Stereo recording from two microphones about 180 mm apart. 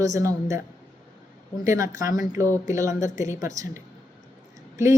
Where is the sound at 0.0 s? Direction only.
20° right (ahead or behind).